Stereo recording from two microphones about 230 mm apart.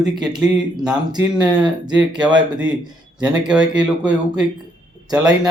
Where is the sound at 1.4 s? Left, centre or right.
Centre.